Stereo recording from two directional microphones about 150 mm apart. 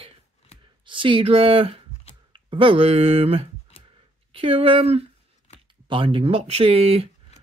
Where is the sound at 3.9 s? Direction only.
40° right (ahead or behind).